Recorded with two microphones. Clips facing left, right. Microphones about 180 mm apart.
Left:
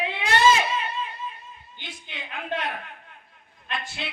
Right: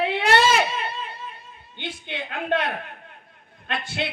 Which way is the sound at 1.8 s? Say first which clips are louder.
Right 9 dB; 70° right (ahead or behind).